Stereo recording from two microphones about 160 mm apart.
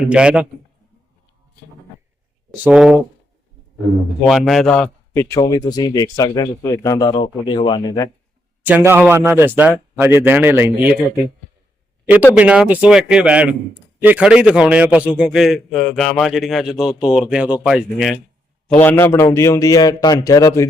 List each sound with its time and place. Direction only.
0.1 s speech: 5° right (ahead or behind)
2.6 s a man's voice: 5° right (ahead or behind)
4.3 s a man's voice: centre (ahead or behind)
5.3 s speech: 25° left (ahead or behind)
8.6 s speech: 10° right (ahead or behind)
12.4 s a man's voice: 10° right (ahead or behind)
18.8 s speech: 15° left (ahead or behind)